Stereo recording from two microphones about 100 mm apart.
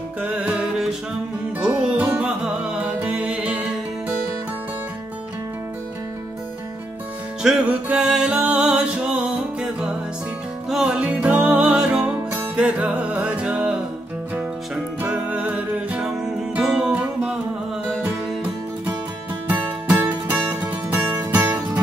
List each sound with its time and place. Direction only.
0.2 s music: 15° right (ahead or behind)
7.4 s music: 10° right (ahead or behind)
15.0 s music: 15° right (ahead or behind)
20.1 s music: 15° right (ahead or behind)